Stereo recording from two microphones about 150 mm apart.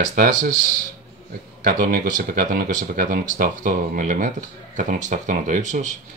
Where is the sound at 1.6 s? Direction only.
80° right.